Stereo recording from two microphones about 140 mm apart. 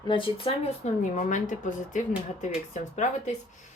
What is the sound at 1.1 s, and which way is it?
Speech, 65° left (ahead or behind).